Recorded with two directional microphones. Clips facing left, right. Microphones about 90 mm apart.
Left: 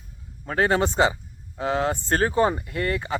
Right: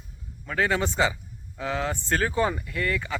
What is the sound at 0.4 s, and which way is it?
Speech, 45° left (ahead or behind).